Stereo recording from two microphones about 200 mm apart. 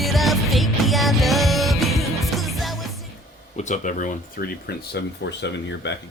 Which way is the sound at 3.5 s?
35° left (ahead or behind).